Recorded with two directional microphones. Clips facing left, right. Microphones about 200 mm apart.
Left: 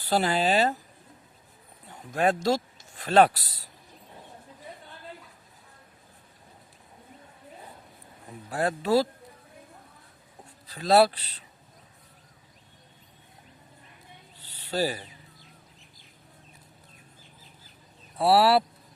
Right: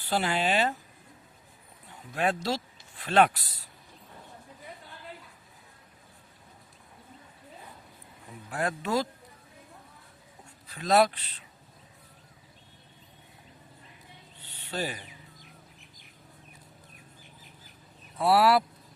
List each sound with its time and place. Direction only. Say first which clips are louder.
0.0 s a man's voice: left 3 dB; 40° left (ahead or behind)
2.1 s speech: left 5 dB; 45° left (ahead or behind)
8.4 s a man's voice: left 5 dB; 35° left (ahead or behind)
10.7 s a man's voice: left 3 dB; 35° left (ahead or behind)
14.4 s owl: left 6 dB; 40° left (ahead or behind)
18.2 s a man's voice: left 2 dB; 30° left (ahead or behind)